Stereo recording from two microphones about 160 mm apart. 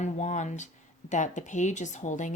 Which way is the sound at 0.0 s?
45° left (ahead or behind).